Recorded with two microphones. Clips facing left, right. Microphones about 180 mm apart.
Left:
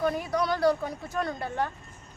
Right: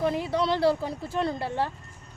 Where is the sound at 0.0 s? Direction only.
25° right (ahead or behind).